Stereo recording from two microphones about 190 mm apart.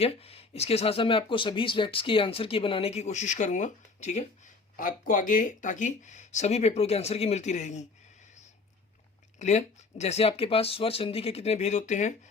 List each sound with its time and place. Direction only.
0.0 s speech: 30° left (ahead or behind)
9.4 s speech: 40° left (ahead or behind)